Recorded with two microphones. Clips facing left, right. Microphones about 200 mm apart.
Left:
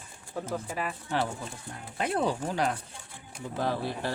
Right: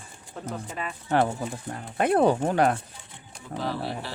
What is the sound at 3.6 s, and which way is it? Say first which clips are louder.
Speech: left 1 dB; 50° left (ahead or behind).